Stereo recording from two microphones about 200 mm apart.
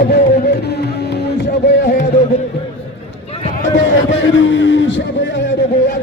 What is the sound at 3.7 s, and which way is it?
Music, 70° left (ahead or behind).